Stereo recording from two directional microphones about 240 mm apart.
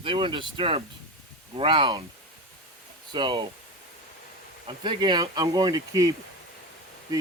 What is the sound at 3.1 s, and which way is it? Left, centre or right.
Speech, centre.